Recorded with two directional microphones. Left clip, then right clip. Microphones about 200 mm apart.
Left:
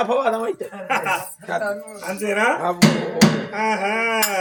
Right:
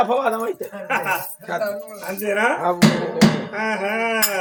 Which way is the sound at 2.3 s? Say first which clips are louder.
Even; 15° left (ahead or behind).